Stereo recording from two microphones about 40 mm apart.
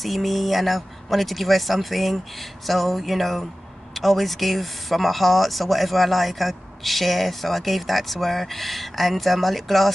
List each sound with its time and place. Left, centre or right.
0.0 s speech: centre